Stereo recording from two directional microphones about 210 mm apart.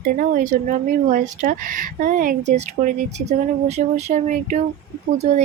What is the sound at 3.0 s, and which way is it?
Speech, 55° right (ahead or behind).